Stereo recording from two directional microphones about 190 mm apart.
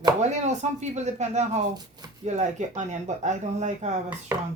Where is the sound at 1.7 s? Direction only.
20° right (ahead or behind).